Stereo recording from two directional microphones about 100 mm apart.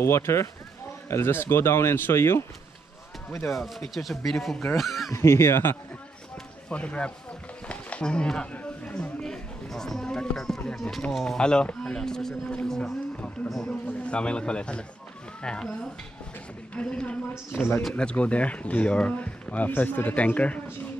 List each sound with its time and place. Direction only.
0.0 s speech: 25° left (ahead or behind)
3.5 s speech: centre (ahead or behind)
5.1 s speech: 25° left (ahead or behind)
6.7 s speech: 10° left (ahead or behind)
7.6 s a sound: 10° left (ahead or behind)
13.5 s a man's voice: 5° left (ahead or behind)
17.3 s speech: 20° left (ahead or behind)
17.8 s speech: 10° left (ahead or behind)